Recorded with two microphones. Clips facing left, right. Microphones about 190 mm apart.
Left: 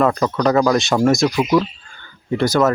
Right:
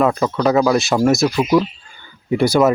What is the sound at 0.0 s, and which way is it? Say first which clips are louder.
Speech: even; 5° right (ahead or behind).